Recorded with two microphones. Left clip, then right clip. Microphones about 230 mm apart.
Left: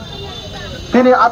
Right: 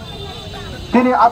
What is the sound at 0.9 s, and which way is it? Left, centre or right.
Speech, right.